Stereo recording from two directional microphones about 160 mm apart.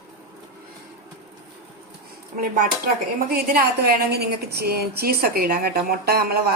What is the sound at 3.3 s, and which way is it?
A woman's voice, 70° right (ahead or behind).